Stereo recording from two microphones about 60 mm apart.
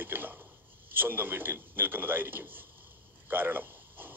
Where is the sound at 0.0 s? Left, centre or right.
Right.